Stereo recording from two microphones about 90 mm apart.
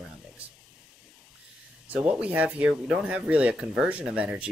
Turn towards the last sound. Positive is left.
turn(degrees=-15)  # may be behind; listen again after turning